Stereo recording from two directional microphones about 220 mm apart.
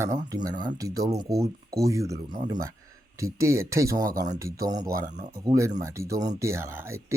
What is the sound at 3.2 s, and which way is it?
Speech, 15° right (ahead or behind).